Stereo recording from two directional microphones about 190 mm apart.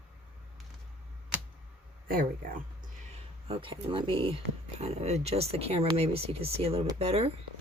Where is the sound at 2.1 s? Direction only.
45° right (ahead or behind).